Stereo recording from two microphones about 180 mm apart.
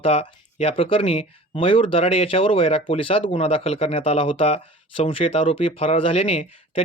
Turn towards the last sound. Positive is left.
turn(degrees=30)  # may be behind; listen again after turning